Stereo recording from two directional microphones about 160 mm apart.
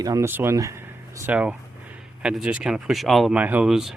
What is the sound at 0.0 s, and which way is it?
Speech, 20° right (ahead or behind).